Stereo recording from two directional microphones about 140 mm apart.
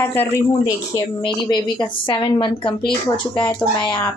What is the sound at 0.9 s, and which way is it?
A woman's voice, 35° left (ahead or behind).